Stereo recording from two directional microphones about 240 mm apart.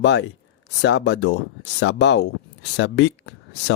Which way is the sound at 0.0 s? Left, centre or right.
Left.